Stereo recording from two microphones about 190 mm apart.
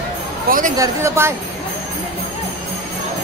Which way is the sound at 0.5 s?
45° right (ahead or behind).